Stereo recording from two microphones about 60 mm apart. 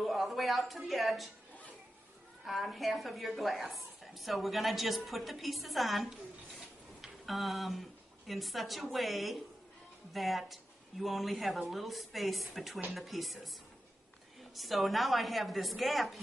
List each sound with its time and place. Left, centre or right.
0.0 s speech: centre
2.4 s a woman's voice: centre
14.5 s speech: centre